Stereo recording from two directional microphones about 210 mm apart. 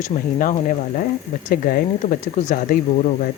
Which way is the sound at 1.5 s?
40° left (ahead or behind).